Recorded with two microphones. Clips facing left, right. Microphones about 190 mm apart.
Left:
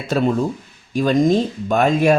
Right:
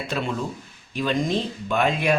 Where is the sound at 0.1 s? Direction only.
40° left (ahead or behind).